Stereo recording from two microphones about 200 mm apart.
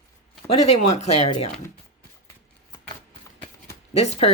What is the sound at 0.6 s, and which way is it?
Speech, 35° left (ahead or behind).